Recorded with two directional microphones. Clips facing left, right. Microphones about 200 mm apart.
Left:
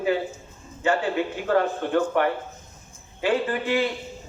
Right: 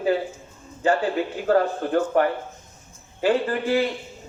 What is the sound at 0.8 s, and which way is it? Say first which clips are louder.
A man's voice: right 2 dB; 35° right (ahead or behind).